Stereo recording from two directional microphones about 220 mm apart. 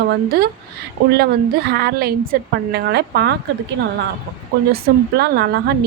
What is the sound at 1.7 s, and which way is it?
A woman's voice, 45° right (ahead or behind).